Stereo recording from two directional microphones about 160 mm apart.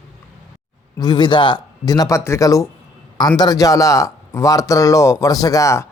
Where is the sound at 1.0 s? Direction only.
25° left (ahead or behind).